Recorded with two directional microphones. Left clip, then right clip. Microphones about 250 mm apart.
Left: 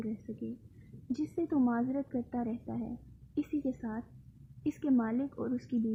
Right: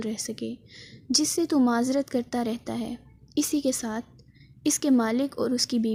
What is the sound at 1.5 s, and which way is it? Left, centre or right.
A woman's voice, right.